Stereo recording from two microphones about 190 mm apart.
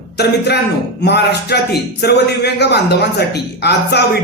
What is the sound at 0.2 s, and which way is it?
A man's voice, 60° left (ahead or behind).